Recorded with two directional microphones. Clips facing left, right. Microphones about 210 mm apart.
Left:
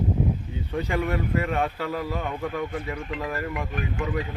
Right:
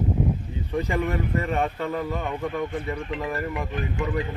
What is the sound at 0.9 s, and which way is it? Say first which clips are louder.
Speech: left 2 dB; 5° left (ahead or behind).